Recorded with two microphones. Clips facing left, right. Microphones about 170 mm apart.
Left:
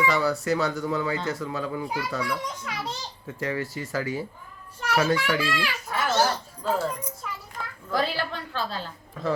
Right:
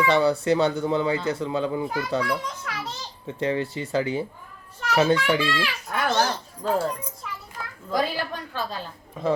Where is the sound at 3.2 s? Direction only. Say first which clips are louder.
Right 5 dB; 25° right (ahead or behind).